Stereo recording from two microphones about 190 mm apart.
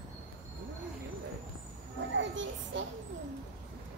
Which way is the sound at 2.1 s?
75° right (ahead or behind).